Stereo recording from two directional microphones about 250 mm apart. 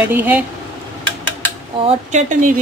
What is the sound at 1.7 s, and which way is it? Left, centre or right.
Speech, right.